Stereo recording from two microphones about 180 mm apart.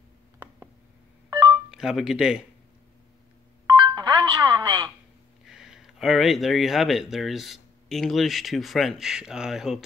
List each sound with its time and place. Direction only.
1.5 s speech: 5° right (ahead or behind)
3.7 s music: 25° right (ahead or behind)
5.4 s speech: centre (ahead or behind)